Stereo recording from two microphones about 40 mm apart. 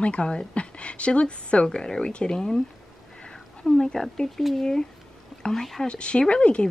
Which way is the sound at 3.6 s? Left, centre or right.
Centre.